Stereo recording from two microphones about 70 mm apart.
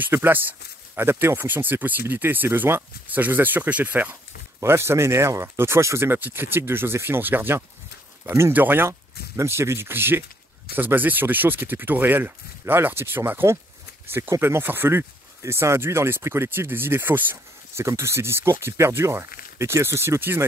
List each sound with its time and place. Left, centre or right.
0.0 s speech: right
4.6 s speech: right
17.8 s speech: right